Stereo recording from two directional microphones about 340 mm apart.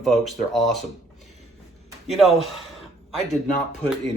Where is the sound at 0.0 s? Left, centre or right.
Centre.